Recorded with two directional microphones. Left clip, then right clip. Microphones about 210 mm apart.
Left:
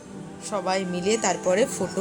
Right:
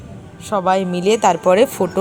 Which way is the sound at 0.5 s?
30° right (ahead or behind).